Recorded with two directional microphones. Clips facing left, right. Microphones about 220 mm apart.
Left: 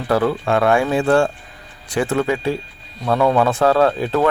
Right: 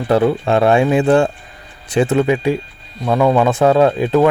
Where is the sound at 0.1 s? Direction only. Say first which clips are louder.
Right 3 dB; 20° right (ahead or behind).